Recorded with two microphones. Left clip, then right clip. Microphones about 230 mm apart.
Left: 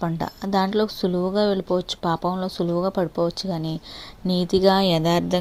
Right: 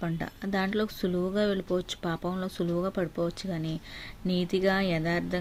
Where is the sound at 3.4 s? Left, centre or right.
Centre.